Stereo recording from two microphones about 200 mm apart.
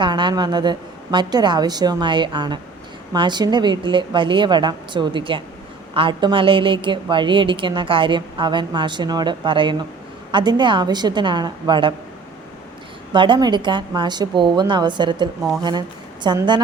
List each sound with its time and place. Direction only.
0.0 s a woman's voice: 20° right (ahead or behind)
13.1 s a woman's voice: 25° right (ahead or behind)